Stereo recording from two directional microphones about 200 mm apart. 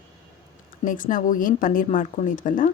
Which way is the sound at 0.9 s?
40° left (ahead or behind).